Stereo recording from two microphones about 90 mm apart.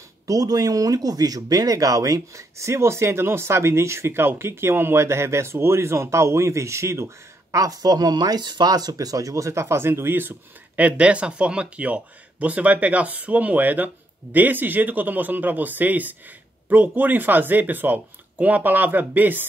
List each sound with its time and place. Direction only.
0.3 s speech: 45° right (ahead or behind)
7.5 s speech: 45° right (ahead or behind); by 10.3 s 25° right (ahead or behind)
10.8 s speech: 15° right (ahead or behind)